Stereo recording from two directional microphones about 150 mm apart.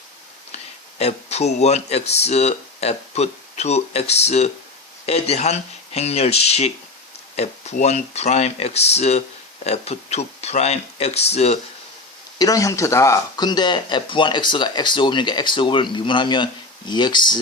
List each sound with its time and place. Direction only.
0.5 s speech: 45° left (ahead or behind)
12.4 s speech: 25° left (ahead or behind)